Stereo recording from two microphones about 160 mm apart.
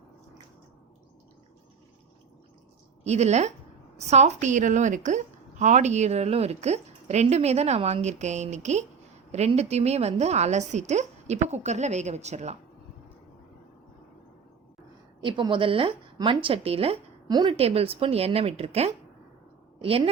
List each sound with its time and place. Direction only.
3.0 s a woman's voice: 45° right (ahead or behind)
15.2 s a woman's voice: 30° right (ahead or behind)
17.2 s a woman's voice: 25° right (ahead or behind)
17.6 s a woman's voice: 40° right (ahead or behind)